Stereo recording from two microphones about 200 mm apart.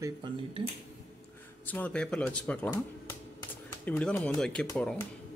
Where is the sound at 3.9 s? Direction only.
5° left (ahead or behind).